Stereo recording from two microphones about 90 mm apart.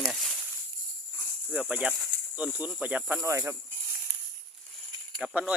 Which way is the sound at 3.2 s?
35° right (ahead or behind).